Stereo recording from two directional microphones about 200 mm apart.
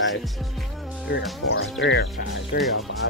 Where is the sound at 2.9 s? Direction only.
65° left (ahead or behind).